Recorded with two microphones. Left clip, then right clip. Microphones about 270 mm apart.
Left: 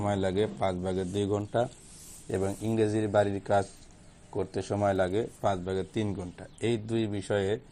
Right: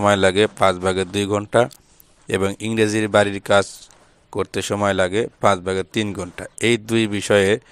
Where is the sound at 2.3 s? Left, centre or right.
Right.